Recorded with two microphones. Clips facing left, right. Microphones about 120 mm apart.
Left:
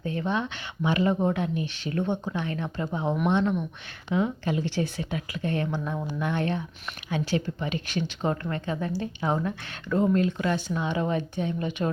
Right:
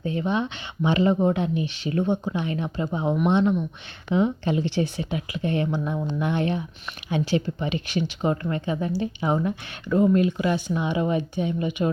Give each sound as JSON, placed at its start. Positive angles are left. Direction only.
{"t": 0.0, "sound": "a woman's voice", "side_deg": -20}